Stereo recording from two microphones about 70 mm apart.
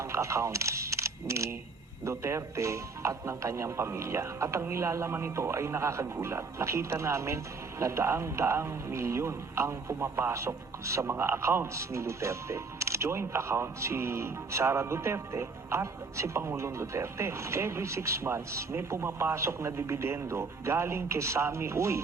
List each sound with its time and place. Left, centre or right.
0.0 s speech: right